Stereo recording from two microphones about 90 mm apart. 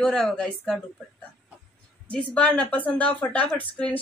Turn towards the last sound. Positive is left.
turn(degrees=15)  # may be behind; listen again after turning